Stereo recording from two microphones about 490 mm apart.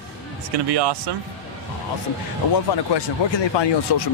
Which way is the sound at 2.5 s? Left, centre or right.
Left.